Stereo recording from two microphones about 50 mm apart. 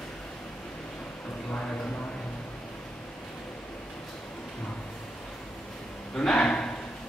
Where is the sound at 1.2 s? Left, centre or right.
Left.